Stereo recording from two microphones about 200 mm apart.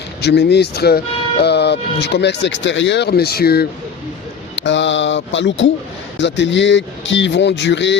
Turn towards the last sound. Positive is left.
turn(degrees=65)  # may be behind; listen again after turning